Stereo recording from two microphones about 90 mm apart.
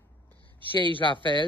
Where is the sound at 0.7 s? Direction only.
70° right (ahead or behind).